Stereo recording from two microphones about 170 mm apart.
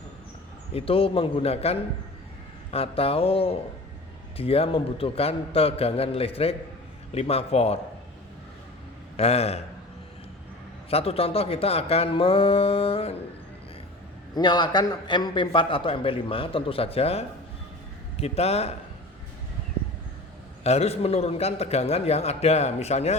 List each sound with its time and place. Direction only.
0.7 s a man's voice: 35° left (ahead or behind)
9.1 s a man's voice: 35° left (ahead or behind)
10.8 s a man's voice: 35° left (ahead or behind)
14.3 s a man's voice: 25° left (ahead or behind)
20.7 s a man's voice: 40° left (ahead or behind)